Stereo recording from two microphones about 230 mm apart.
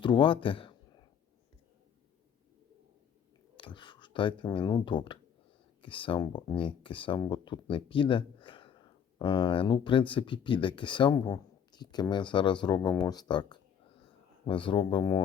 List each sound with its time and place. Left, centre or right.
0.0 s speech: left
3.6 s speech: left